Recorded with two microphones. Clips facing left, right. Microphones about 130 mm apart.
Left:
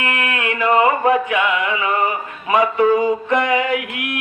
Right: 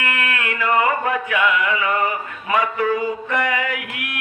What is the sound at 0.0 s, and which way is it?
Music, 20° left (ahead or behind).